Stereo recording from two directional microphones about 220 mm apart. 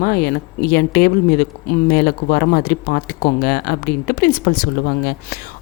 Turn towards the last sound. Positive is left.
turn(degrees=45)  # may be behind; listen again after turning